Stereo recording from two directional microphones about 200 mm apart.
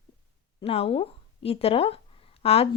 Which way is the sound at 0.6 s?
30° left (ahead or behind).